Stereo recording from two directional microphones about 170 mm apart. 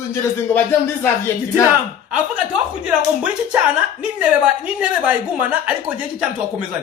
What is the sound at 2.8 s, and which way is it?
A woman's voice, 5° right (ahead or behind).